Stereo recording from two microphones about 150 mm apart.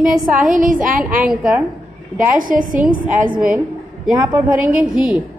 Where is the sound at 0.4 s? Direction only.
65° right (ahead or behind).